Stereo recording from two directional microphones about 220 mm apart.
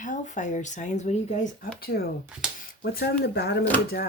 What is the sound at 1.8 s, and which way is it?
Speech, 45° left (ahead or behind).